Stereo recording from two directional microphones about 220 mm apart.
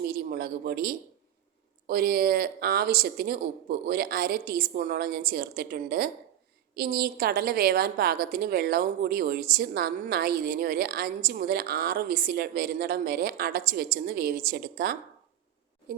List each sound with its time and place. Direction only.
0.0 s a woman's voice: 45° right (ahead or behind)